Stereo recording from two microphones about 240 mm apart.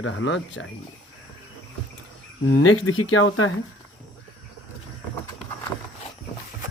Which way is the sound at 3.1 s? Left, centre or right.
Left.